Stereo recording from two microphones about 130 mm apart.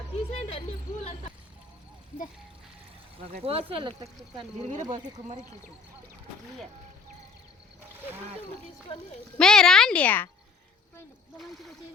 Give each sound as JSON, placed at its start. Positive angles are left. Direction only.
{"t": 0.1, "sound": "a sound", "side_deg": 50}
{"t": 3.2, "sound": "speech", "side_deg": -45}
{"t": 4.8, "sound": "speech", "side_deg": -30}
{"t": 8.9, "sound": "speech", "side_deg": 45}
{"t": 9.4, "sound": "speech", "side_deg": 5}